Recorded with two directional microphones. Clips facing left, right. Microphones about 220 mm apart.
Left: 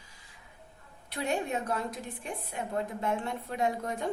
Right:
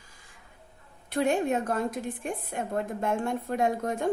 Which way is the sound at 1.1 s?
50° right (ahead or behind).